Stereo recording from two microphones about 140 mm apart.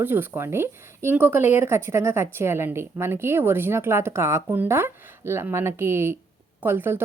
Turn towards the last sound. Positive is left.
turn(degrees=-15)  # may be behind; listen again after turning